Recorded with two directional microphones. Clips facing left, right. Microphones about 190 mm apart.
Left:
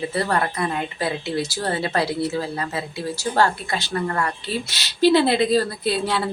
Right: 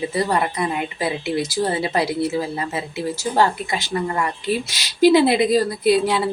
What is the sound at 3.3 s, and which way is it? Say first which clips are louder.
Speech: right 1 dB; 15° right (ahead or behind).